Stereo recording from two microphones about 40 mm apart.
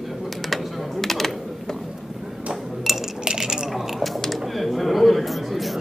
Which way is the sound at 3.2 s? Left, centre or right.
Centre.